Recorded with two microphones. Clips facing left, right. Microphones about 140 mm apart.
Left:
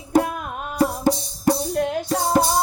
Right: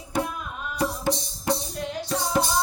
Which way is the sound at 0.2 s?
55° left (ahead or behind).